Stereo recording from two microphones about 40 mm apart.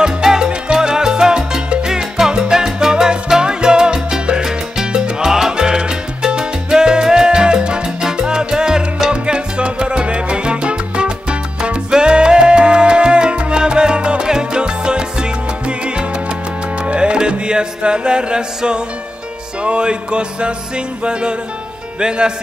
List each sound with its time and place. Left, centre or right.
0.0 s salsa music: centre
16.8 s music: right
22.0 s speech: right